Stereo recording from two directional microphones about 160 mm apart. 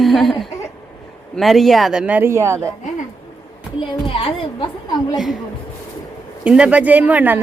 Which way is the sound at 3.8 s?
35° left (ahead or behind).